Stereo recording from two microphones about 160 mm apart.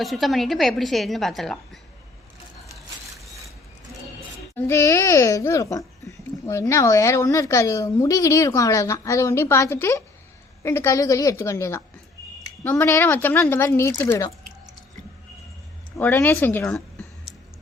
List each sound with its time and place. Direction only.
0.0 s a woman's voice: centre (ahead or behind)
4.5 s a child's voice: 15° left (ahead or behind)
16.0 s a woman's voice: 10° left (ahead or behind)